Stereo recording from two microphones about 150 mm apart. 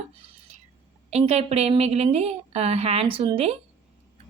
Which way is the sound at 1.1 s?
45° right (ahead or behind).